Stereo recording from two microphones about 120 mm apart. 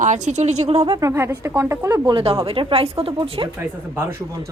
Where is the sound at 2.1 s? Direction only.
50° right (ahead or behind).